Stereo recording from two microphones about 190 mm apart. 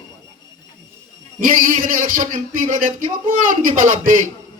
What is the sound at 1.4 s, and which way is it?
Speech, 45° right (ahead or behind).